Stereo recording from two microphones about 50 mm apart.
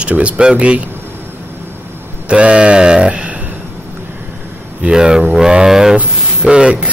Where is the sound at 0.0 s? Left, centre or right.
Right.